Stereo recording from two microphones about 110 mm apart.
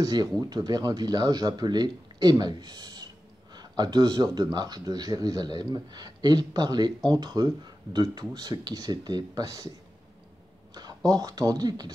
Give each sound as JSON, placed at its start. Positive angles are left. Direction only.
{"t": 0.0, "sound": "speech", "side_deg": -40}
{"t": 10.7, "sound": "a sound", "side_deg": -35}
{"t": 11.1, "sound": "speech", "side_deg": -35}